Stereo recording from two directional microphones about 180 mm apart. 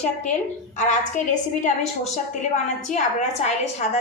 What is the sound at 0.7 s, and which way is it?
A woman's voice, 45° left (ahead or behind).